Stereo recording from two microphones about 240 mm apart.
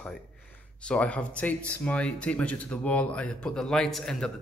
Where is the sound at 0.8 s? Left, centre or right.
Centre.